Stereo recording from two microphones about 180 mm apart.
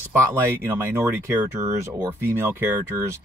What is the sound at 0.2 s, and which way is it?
Speech, 15° right (ahead or behind).